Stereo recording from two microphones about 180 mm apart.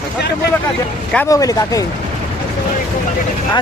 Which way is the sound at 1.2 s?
20° left (ahead or behind).